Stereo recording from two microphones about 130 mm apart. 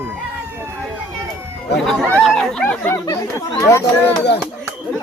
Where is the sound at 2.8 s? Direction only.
20° left (ahead or behind).